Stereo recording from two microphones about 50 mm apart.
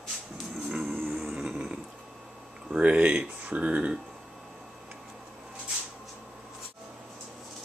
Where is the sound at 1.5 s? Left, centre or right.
Right.